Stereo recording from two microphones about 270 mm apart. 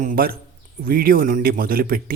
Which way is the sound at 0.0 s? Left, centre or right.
Right.